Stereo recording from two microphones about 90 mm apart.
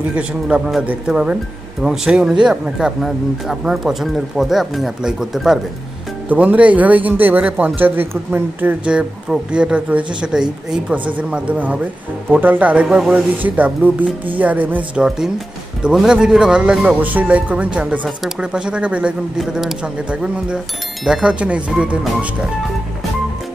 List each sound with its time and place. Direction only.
0.1 s speech: 15° right (ahead or behind)
6.2 s speech: 15° right (ahead or behind)
15.0 s speech: 5° right (ahead or behind)